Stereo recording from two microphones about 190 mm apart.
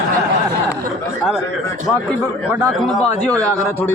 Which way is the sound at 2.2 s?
15° right (ahead or behind).